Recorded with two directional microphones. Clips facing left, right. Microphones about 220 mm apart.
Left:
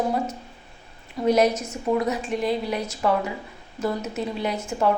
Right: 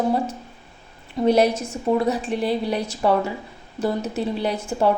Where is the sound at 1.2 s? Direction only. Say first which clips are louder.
Right 2 dB; 30° right (ahead or behind).